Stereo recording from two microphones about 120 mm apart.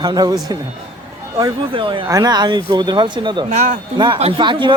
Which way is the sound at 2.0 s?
30° right (ahead or behind).